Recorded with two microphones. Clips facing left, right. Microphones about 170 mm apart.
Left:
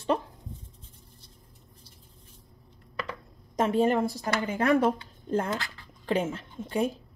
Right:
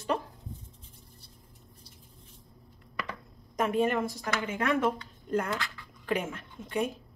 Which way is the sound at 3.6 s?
30° left (ahead or behind).